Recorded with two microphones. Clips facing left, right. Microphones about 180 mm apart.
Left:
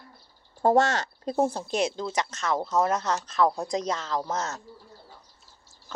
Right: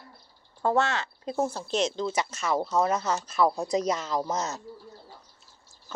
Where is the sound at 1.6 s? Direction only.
10° left (ahead or behind); by 4.6 s 15° right (ahead or behind).